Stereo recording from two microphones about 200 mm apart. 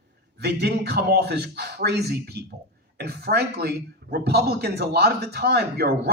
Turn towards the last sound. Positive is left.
turn(degrees=-55)  # may be behind; listen again after turning